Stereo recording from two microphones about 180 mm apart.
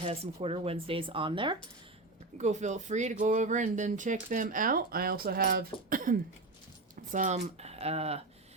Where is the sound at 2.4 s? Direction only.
40° right (ahead or behind).